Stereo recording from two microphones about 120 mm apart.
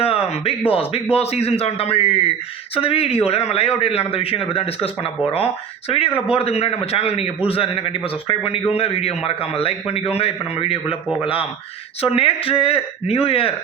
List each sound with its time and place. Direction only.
0.0 s a sound: 55° left (ahead or behind)
0.7 s a man's voice: 55° left (ahead or behind)
6.1 s a man's voice: 55° left (ahead or behind)